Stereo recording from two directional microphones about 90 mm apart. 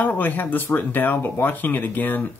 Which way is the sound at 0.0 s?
20° left (ahead or behind).